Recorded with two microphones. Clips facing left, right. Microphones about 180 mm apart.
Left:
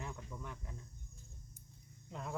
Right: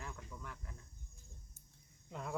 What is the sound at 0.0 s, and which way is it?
Cricket, 15° left (ahead or behind).